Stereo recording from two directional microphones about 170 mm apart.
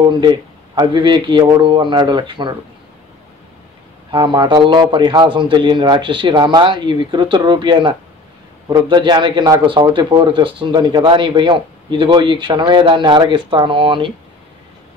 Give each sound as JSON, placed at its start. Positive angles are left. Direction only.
{"t": 0.7, "sound": "a man's voice", "side_deg": -25}
{"t": 4.1, "sound": "a man's voice", "side_deg": -25}